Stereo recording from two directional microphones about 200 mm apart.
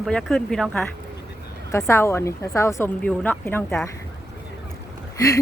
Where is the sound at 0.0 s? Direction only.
Centre (ahead or behind).